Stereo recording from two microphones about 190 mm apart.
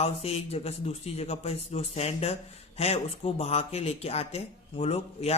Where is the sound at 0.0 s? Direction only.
35° left (ahead or behind).